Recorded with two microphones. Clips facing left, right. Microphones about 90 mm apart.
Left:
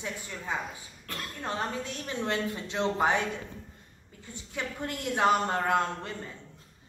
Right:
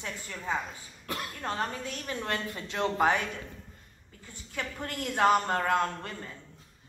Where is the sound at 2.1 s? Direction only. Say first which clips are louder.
Left 3 dB; 20° left (ahead or behind).